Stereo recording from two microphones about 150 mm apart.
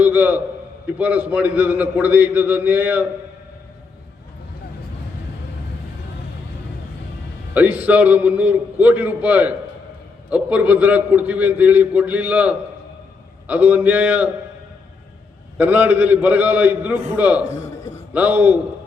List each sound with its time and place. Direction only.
0.0 s a man's voice: 10° right (ahead or behind)
7.5 s a man's voice: 10° right (ahead or behind)
15.5 s a man's voice: 10° right (ahead or behind)
17.5 s a sound: 20° left (ahead or behind)
18.1 s a man's voice: 10° right (ahead or behind)